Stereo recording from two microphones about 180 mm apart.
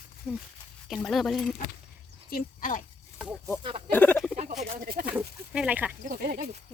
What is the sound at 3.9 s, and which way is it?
Speech, 10° left (ahead or behind).